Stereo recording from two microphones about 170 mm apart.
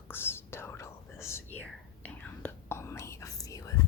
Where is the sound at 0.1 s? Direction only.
15° left (ahead or behind).